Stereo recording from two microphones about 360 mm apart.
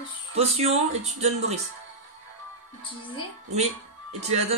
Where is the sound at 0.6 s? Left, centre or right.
Centre.